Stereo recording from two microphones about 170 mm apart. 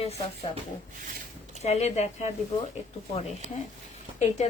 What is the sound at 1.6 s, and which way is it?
Speech, 40° left (ahead or behind).